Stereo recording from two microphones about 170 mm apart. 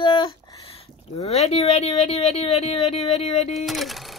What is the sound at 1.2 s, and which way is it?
Speech, 35° left (ahead or behind).